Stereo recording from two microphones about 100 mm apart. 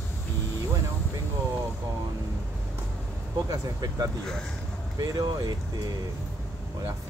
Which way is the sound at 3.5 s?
40° right (ahead or behind).